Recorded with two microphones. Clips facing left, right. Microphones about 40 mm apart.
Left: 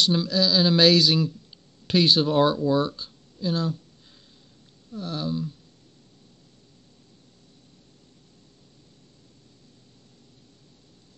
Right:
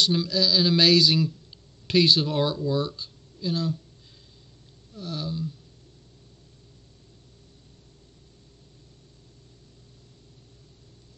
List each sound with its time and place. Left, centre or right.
0.3 s speech: left
4.9 s speech: left